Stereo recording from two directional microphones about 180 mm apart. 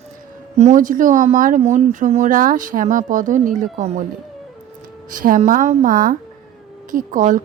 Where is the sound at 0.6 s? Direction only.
45° right (ahead or behind).